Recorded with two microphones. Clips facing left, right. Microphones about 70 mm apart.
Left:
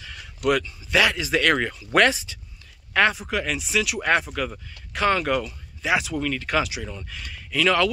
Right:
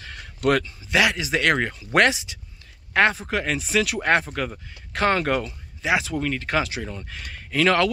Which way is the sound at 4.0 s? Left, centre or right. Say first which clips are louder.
Right 1 dB; right.